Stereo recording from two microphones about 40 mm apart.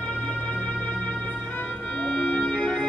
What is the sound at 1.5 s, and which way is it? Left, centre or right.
Organ, left.